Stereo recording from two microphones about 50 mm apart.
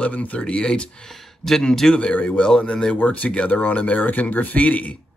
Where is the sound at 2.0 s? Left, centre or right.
Left.